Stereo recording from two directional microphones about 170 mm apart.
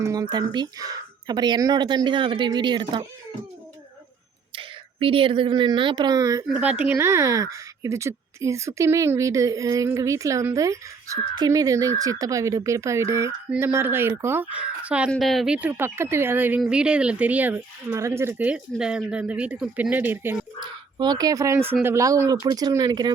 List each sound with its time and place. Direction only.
0.0 s speech: 20° right (ahead or behind)
4.5 s a woman's voice: 30° right (ahead or behind)
6.5 s speech: 10° right (ahead or behind)
20.6 s speech: 25° right (ahead or behind)